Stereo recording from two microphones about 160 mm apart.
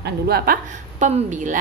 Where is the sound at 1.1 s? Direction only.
50° right (ahead or behind).